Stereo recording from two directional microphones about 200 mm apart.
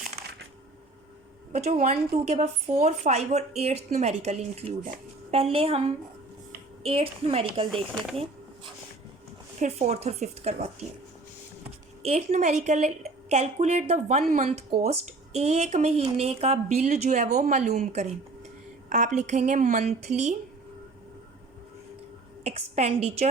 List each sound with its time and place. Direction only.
1.5 s a woman's voice: 35° right (ahead or behind)
6.8 s a woman's voice: 30° right (ahead or behind)
7.7 s speech: centre (ahead or behind)
8.1 s a sound: 30° right (ahead or behind)
9.6 s a woman's voice: 35° right (ahead or behind)
12.0 s a woman's voice: 35° right (ahead or behind)
22.4 s a woman's voice: 30° right (ahead or behind)